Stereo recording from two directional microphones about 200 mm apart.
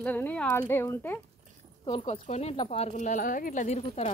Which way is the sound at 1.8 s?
25° left (ahead or behind).